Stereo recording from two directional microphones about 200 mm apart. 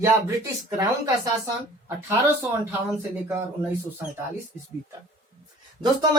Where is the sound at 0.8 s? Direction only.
20° right (ahead or behind).